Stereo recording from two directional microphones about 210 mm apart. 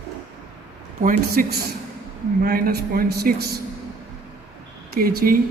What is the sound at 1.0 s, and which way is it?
A woman's voice, 40° right (ahead or behind).